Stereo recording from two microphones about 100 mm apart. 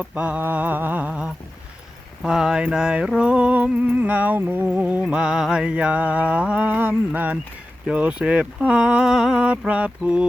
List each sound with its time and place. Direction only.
0.0 s music: 15° right (ahead or behind)